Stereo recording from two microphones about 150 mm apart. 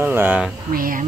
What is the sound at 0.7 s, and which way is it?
Speech, 70° right (ahead or behind).